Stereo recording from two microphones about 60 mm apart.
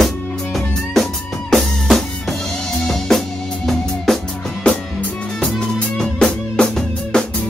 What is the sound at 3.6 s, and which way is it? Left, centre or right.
Music, centre.